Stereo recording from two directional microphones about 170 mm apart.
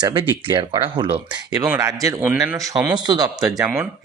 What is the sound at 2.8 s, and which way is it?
Speech, 5° right (ahead or behind).